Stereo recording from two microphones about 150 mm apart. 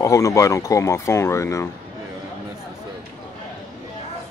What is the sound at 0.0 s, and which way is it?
Speech, 20° left (ahead or behind).